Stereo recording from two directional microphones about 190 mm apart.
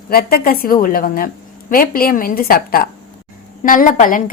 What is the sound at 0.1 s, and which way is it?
A woman's voice, 50° left (ahead or behind).